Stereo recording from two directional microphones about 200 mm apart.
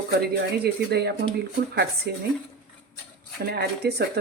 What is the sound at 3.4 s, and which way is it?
Speech, 55° right (ahead or behind).